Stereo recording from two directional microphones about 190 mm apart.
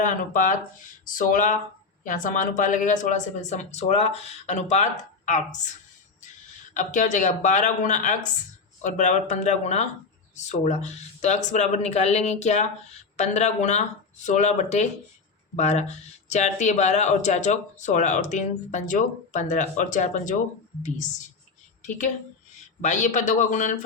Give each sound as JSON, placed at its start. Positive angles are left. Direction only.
{"t": 0.0, "sound": "speech", "side_deg": 45}
{"t": 6.7, "sound": "speech", "side_deg": 40}